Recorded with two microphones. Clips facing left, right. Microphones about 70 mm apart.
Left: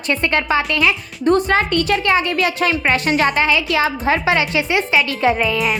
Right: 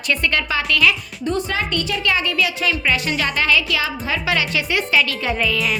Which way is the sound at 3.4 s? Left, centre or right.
Left.